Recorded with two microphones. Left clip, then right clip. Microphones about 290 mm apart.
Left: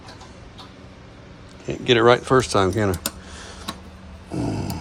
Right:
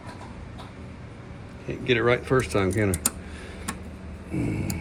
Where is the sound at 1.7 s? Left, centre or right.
Centre.